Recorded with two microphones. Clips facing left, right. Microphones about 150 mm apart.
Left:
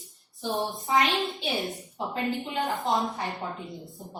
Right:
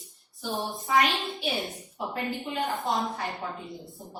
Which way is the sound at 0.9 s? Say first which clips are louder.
Even; 20° left (ahead or behind).